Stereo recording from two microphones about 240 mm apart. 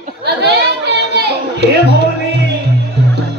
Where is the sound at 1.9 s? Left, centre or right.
Right.